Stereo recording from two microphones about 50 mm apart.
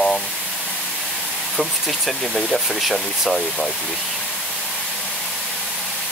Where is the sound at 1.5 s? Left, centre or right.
Centre.